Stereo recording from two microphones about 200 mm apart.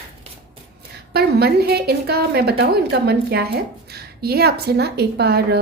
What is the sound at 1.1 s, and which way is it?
A woman's voice, 55° right (ahead or behind).